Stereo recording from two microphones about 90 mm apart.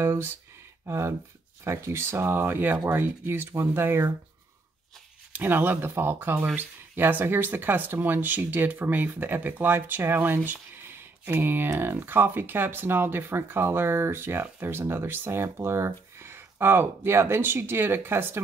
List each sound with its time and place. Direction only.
0.0 s speech: 30° right (ahead or behind)
5.3 s speech: 20° right (ahead or behind)